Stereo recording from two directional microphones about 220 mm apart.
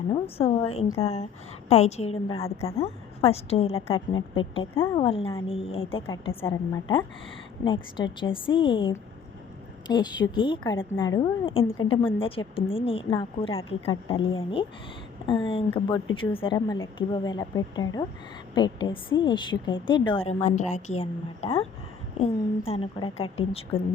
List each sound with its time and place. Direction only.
0.1 s a woman's voice: 25° left (ahead or behind)